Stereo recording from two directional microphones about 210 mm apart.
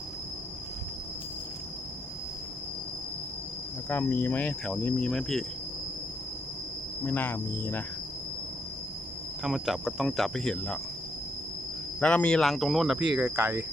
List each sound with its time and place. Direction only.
3.8 s cricket: 10° left (ahead or behind)
7.0 s cricket: 10° left (ahead or behind)
9.4 s speech: centre (ahead or behind)
11.9 s speech: 5° left (ahead or behind); by 13.7 s 10° right (ahead or behind)